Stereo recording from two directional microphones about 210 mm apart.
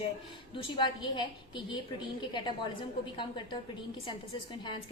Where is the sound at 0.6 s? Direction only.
20° left (ahead or behind).